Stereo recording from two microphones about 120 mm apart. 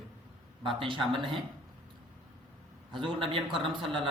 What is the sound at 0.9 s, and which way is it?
Speech, 45° right (ahead or behind).